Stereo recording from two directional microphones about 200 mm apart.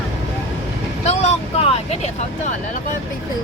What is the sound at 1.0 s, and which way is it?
Vehicle, 30° left (ahead or behind).